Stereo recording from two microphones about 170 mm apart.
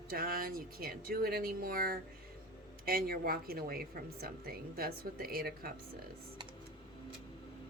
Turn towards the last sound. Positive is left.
turn(degrees=-60)  # may be behind; listen again after turning